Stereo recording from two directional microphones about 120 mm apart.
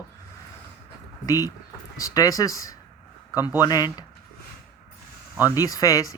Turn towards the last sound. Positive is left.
turn(degrees=25)  # may be behind; listen again after turning